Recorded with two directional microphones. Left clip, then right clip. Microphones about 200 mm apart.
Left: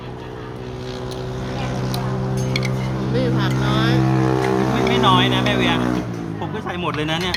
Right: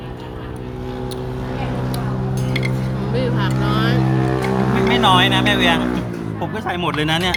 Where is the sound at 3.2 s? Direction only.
5° left (ahead or behind).